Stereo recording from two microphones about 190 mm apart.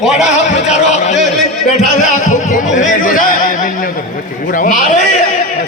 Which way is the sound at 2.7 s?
45° left (ahead or behind).